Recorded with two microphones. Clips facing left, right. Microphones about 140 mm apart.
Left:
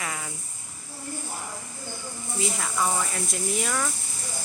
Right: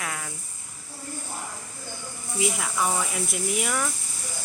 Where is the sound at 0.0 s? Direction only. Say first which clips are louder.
Even; centre (ahead or behind).